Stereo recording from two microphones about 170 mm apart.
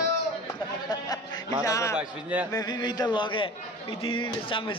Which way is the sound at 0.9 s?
25° left (ahead or behind).